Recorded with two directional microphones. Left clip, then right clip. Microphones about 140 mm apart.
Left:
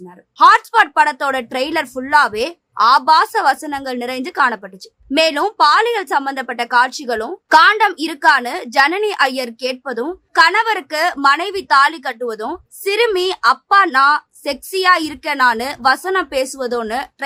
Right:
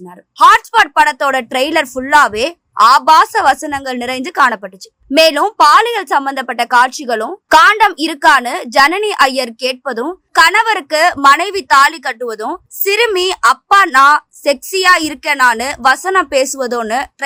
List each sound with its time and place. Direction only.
0.3 s a woman's voice: 30° right (ahead or behind)